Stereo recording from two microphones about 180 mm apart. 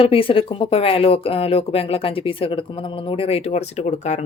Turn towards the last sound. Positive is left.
turn(degrees=40)  # may be behind; listen again after turning